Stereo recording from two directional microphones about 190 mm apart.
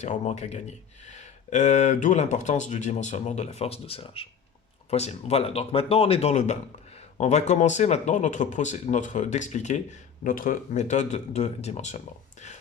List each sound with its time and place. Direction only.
0.0 s speech: 40° left (ahead or behind)